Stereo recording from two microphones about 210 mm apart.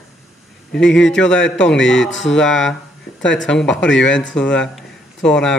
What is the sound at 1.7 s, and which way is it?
Speech, 60° left (ahead or behind).